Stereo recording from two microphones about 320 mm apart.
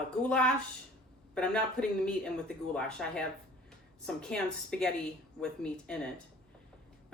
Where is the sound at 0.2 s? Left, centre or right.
Centre.